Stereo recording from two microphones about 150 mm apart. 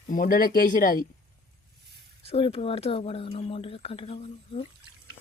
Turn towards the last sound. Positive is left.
turn(degrees=40)  # may be behind; listen again after turning